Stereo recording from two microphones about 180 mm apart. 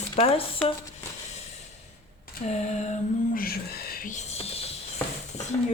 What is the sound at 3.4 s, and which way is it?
Whispering, 60° left (ahead or behind).